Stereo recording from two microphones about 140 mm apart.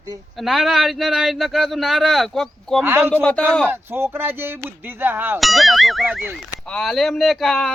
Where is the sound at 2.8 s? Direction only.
15° right (ahead or behind).